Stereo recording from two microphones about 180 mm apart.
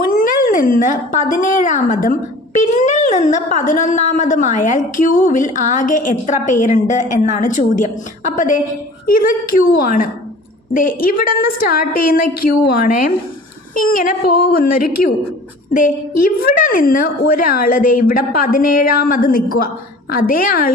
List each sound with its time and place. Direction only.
0.2 s speech: 50° left (ahead or behind)